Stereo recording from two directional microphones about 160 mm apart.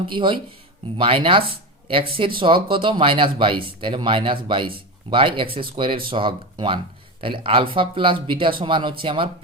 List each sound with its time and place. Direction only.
0.1 s speech: 30° right (ahead or behind)